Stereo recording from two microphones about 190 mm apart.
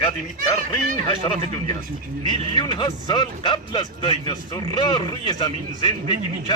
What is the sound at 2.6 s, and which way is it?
Speech, 25° left (ahead or behind).